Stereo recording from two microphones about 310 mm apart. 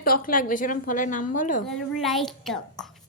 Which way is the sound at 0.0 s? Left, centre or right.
Left.